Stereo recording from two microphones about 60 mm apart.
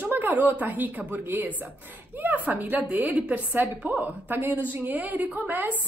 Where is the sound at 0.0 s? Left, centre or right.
Right.